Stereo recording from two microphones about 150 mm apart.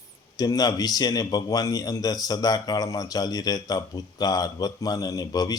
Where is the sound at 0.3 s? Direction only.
25° left (ahead or behind).